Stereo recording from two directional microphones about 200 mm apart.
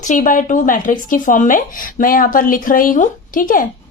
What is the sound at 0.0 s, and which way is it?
Speech, 40° left (ahead or behind).